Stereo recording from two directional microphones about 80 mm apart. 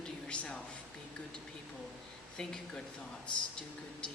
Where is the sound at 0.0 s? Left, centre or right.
Centre.